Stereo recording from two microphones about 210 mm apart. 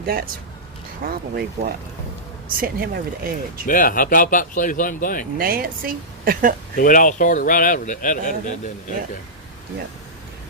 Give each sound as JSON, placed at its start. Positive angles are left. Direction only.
{"t": 0.0, "sound": "a woman's voice", "side_deg": -45}
{"t": 3.7, "sound": "speech", "side_deg": 40}
{"t": 5.4, "sound": "a woman's voice", "side_deg": -45}
{"t": 6.7, "sound": "speech", "side_deg": 40}